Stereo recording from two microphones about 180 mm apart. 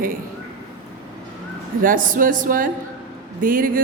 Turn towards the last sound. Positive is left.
turn(degrees=-50)  # may be behind; listen again after turning